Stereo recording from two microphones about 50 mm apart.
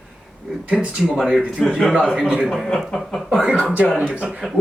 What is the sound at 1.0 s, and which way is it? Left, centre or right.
Speech, centre.